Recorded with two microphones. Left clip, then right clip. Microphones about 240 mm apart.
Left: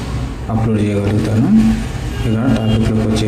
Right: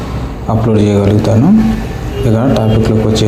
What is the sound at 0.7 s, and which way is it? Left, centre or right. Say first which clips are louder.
Speech: right 7 dB; centre.